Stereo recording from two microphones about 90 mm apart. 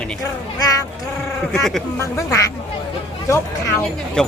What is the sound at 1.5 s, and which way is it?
Speech, 5° left (ahead or behind).